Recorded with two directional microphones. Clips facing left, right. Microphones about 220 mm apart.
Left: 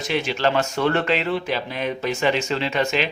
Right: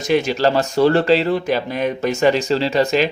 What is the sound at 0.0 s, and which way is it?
A man's voice, 45° right (ahead or behind).